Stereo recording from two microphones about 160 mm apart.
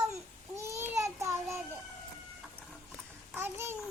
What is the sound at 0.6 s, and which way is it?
Child singing, 20° right (ahead or behind).